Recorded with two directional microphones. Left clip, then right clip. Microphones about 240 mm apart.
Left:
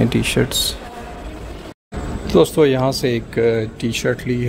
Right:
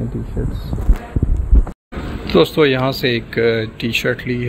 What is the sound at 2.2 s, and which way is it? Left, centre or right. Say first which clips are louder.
Speech: right 1 dB; centre.